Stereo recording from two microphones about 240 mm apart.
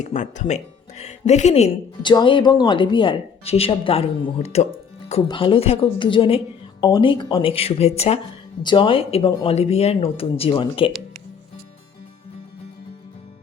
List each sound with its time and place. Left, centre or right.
0.0 s speech: left